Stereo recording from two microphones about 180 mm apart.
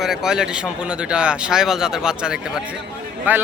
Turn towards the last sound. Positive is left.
turn(degrees=-10)  # may be behind; listen again after turning